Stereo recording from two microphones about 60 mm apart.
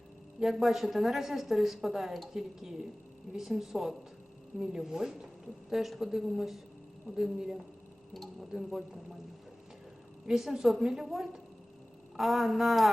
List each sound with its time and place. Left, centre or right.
0.3 s a woman's voice: centre
10.2 s a woman's voice: centre